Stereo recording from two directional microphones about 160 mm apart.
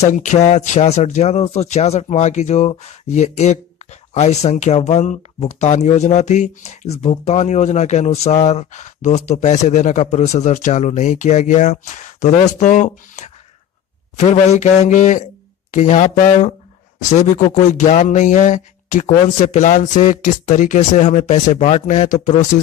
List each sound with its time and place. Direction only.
0.0 s speech: 50° left (ahead or behind)